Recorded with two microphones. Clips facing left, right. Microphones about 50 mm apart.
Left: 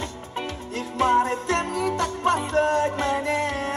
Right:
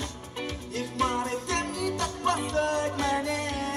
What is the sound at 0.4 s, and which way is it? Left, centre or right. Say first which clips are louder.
Music: left 3 dB; left.